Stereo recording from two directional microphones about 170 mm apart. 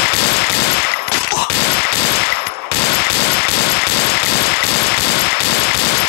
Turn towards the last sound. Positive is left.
turn(degrees=65)  # may be behind; listen again after turning